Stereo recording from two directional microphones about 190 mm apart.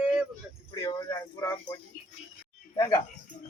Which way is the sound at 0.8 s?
20° left (ahead or behind).